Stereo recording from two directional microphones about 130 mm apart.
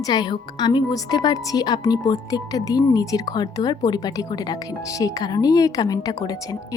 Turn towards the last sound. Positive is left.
turn(degrees=25)  # may be behind; listen again after turning